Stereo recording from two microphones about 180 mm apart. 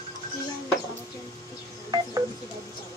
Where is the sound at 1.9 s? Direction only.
20° right (ahead or behind).